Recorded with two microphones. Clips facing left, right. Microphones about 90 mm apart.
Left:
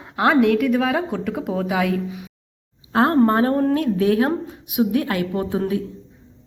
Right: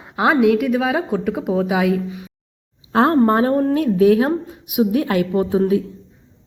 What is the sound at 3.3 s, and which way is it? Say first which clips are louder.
A woman's voice: right 2 dB; 20° right (ahead or behind).